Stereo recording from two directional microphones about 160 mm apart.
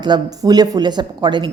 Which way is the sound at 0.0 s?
25° right (ahead or behind).